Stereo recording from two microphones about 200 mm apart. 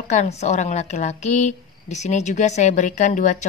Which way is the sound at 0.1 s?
35° left (ahead or behind).